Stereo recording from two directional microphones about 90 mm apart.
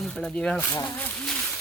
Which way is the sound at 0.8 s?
20° left (ahead or behind).